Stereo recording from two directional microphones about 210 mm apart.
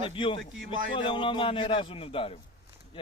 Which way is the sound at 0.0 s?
25° left (ahead or behind).